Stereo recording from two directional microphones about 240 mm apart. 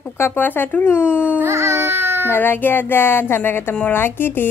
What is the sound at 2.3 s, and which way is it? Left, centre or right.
Speech, centre.